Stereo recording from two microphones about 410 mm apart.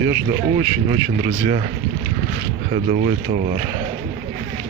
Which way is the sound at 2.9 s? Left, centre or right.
Centre.